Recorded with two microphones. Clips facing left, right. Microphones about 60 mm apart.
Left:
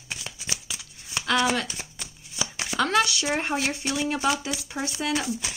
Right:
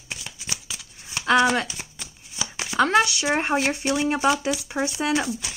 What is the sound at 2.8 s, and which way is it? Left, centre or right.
Speech, right.